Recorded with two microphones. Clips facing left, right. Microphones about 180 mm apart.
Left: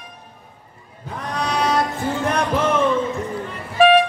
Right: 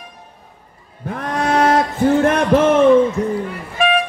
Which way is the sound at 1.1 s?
50° right (ahead or behind).